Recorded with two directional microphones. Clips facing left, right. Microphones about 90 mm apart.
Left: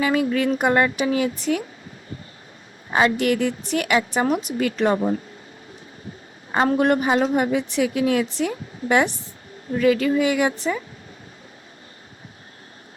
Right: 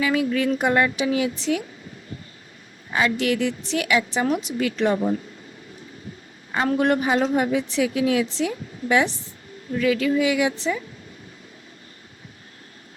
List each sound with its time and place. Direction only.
0.0 s a woman's voice: 45° left (ahead or behind)
2.9 s a woman's voice: 45° left (ahead or behind)
6.5 s a woman's voice: 35° left (ahead or behind); by 9.1 s 50° left (ahead or behind)
9.7 s a woman's voice: 40° left (ahead or behind)